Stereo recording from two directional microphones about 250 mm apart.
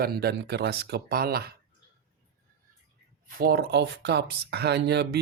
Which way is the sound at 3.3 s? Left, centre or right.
Right.